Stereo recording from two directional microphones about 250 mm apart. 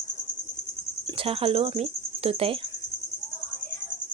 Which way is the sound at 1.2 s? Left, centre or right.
Right.